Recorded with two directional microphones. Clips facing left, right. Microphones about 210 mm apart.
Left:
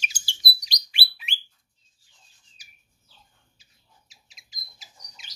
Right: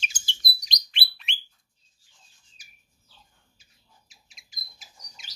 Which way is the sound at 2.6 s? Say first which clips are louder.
Even; 50° right (ahead or behind).